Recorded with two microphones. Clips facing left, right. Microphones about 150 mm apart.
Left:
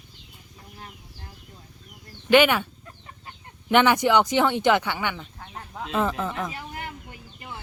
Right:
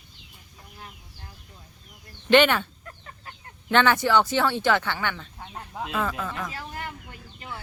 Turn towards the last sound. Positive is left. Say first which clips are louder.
# left 2 dB
turn(degrees=20)  # may be behind; listen again after turning